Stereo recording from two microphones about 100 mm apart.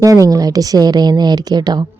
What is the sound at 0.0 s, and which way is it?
A woman's voice, 35° right (ahead or behind).